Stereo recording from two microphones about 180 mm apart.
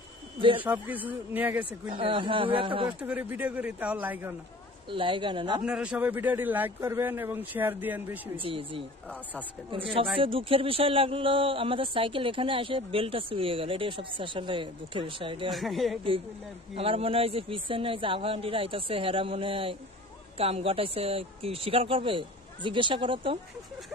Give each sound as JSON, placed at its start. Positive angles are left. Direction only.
{"t": 0.4, "sound": "speech", "side_deg": -30}
{"t": 0.7, "sound": "a man's voice", "side_deg": -10}
{"t": 1.9, "sound": "speech", "side_deg": -30}
{"t": 3.0, "sound": "a man's voice", "side_deg": -10}
{"t": 4.8, "sound": "speech", "side_deg": -30}
{"t": 5.7, "sound": "a man's voice", "side_deg": -5}
{"t": 8.4, "sound": "speech", "side_deg": -30}
{"t": 10.1, "sound": "speech", "side_deg": -30}
{"t": 15.5, "sound": "speech", "side_deg": 0}
{"t": 16.7, "sound": "a man's voice", "side_deg": -35}